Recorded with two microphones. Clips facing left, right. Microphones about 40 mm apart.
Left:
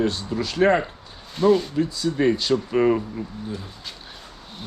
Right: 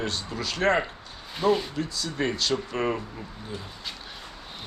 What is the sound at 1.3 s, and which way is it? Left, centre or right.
Speech, centre.